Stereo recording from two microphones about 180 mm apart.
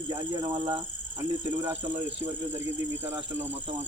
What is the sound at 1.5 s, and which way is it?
Speech, 10° right (ahead or behind).